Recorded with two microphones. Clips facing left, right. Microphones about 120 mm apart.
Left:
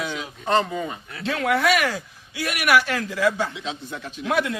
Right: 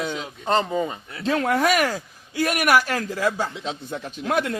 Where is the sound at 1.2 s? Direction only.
40° right (ahead or behind).